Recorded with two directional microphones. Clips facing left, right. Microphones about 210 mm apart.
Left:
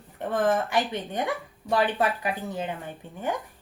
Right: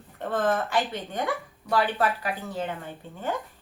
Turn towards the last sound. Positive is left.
turn(degrees=15)  # may be behind; listen again after turning